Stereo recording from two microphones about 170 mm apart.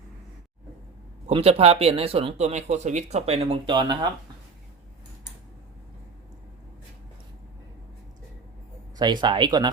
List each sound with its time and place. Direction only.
1.3 s speech: 35° right (ahead or behind)
9.0 s speech: 25° right (ahead or behind)